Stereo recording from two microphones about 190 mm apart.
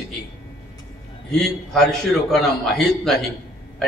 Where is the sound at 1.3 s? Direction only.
Centre (ahead or behind).